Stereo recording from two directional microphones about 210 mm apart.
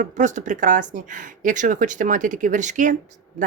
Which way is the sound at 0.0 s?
35° right (ahead or behind).